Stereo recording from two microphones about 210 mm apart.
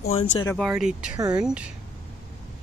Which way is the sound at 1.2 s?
20° right (ahead or behind).